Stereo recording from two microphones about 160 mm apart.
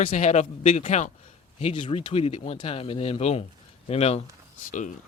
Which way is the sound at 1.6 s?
35° left (ahead or behind).